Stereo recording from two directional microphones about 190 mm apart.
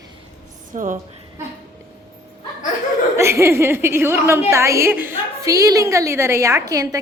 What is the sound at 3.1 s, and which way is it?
A woman's voice, 15° right (ahead or behind).